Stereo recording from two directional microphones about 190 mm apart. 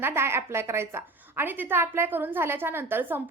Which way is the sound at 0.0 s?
10° right (ahead or behind).